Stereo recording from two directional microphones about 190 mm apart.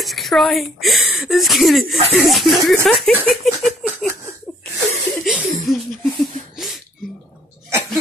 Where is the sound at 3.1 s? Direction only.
10° right (ahead or behind).